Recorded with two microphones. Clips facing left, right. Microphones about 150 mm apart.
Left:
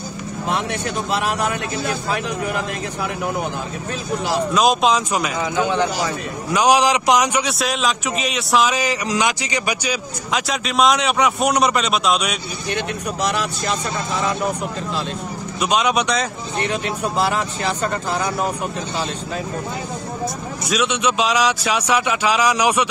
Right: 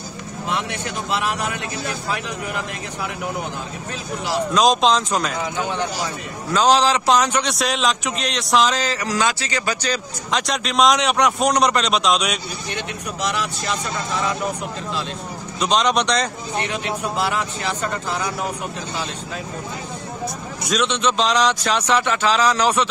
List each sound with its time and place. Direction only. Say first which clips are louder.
1.1 s speech: left 2 dB; 45° left (ahead or behind)
4.6 s a man's voice: right 1 dB; 10° left (ahead or behind)
5.7 s a man's voice: left 5 dB; 90° left
6.5 s a man's voice: left 1 dB; 15° left (ahead or behind)
12.7 s speech: left 6 dB; 45° left (ahead or behind)
15.6 s a man's voice: even; 5° left (ahead or behind)
17.2 s speech: left 5 dB; 40° left (ahead or behind)
20.7 s a man's voice: even; 10° left (ahead or behind)